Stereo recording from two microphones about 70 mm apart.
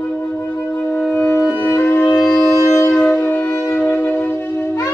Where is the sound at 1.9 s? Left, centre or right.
Left.